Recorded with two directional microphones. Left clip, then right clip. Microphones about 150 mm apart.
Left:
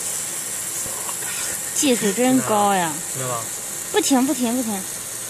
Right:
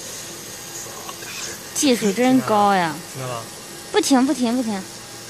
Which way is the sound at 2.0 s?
Centre (ahead or behind).